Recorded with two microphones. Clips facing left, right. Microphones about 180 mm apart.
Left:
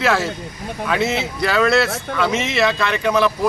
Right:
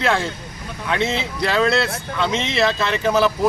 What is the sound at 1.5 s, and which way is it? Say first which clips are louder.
Speech: left 1 dB; 25° right (ahead or behind).